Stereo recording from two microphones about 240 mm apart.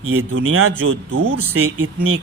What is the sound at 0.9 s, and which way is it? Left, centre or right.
Speech, right.